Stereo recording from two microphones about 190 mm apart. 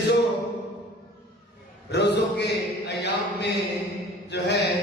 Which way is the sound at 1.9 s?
65° left (ahead or behind).